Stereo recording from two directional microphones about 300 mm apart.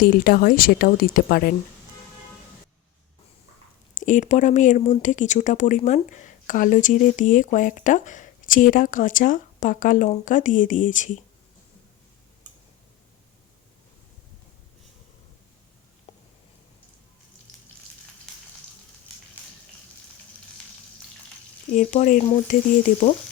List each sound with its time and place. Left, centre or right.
0.0 s speech: left
4.0 s speech: left
16.1 s a sound: centre
21.7 s speech: left